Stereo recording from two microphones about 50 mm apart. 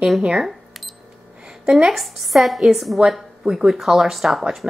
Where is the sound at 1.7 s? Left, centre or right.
Centre.